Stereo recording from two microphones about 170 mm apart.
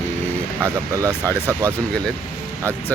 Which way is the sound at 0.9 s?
20° right (ahead or behind).